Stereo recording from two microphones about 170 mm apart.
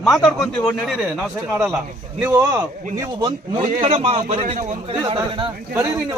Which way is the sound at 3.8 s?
35° right (ahead or behind).